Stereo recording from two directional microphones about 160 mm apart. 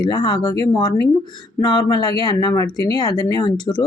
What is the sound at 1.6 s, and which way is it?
Speech, 25° left (ahead or behind).